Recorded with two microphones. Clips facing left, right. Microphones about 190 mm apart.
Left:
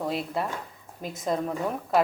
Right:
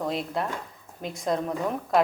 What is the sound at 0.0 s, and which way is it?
A woman's voice, 5° left (ahead or behind).